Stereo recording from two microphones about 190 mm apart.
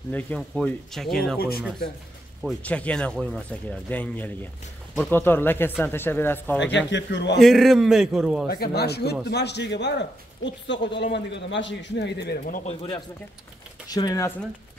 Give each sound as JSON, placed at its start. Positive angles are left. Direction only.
{"t": 0.1, "sound": "speech", "side_deg": 5}
{"t": 2.4, "sound": "speech", "side_deg": 5}
{"t": 6.9, "sound": "a man's voice", "side_deg": 70}
{"t": 7.3, "sound": "speech", "side_deg": 0}
{"t": 8.5, "sound": "speech", "side_deg": 55}
{"t": 12.6, "sound": "speech", "side_deg": 30}